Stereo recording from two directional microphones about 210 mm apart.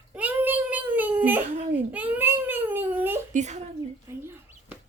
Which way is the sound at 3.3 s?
35° right (ahead or behind).